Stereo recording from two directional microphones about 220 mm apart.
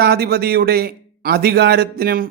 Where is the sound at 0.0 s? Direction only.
45° right (ahead or behind).